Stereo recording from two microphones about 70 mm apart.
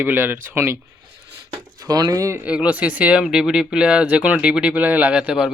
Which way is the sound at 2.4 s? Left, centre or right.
Centre.